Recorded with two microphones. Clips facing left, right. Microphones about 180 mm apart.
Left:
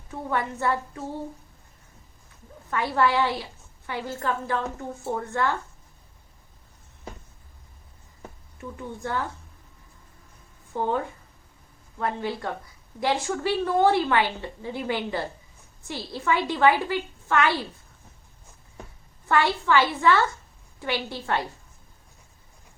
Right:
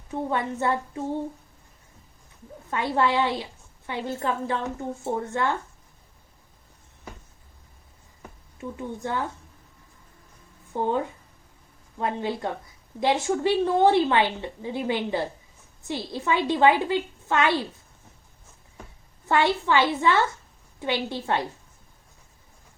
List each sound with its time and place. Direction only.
0.1 s a woman's voice: 25° right (ahead or behind)
2.6 s a woman's voice: 20° right (ahead or behind)
8.7 s a woman's voice: 20° right (ahead or behind)
10.8 s a woman's voice: 20° right (ahead or behind)
19.3 s a woman's voice: 20° right (ahead or behind)